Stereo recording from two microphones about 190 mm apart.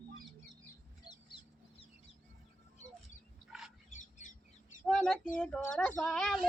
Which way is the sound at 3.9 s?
40° left (ahead or behind).